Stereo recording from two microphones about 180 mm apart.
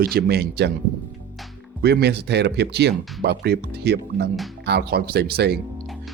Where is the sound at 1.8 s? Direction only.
65° right (ahead or behind).